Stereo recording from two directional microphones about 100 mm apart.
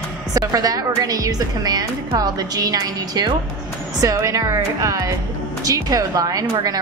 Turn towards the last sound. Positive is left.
turn(degrees=-35)  # may be behind; listen again after turning